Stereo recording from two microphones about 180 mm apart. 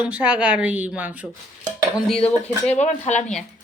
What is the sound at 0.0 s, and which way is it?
A woman's voice, 5° right (ahead or behind).